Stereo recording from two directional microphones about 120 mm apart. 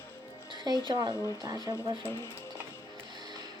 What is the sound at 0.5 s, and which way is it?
Music, 35° right (ahead or behind).